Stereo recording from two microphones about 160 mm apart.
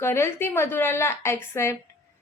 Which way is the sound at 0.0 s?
15° left (ahead or behind).